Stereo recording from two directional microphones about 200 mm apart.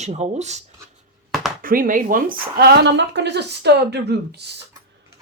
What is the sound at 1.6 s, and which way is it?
A woman's voice, 45° right (ahead or behind).